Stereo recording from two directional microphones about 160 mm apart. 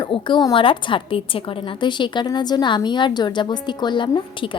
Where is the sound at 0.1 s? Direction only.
30° left (ahead or behind).